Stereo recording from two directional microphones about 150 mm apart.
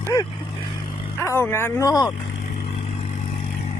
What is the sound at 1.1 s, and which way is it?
Speech, 15° left (ahead or behind).